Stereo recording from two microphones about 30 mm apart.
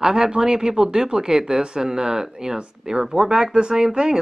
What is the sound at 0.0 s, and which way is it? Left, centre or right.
Speech, right.